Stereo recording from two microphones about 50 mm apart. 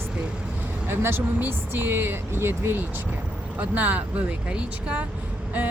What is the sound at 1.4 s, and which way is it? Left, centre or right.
Speech, right.